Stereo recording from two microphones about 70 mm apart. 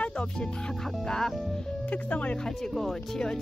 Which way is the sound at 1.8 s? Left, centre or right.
Centre.